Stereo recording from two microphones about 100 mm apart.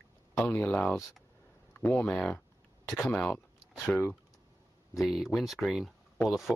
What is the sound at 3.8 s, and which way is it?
Speech, 20° left (ahead or behind).